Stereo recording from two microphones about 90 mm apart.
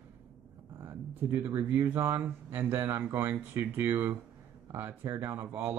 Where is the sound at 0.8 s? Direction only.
25° right (ahead or behind).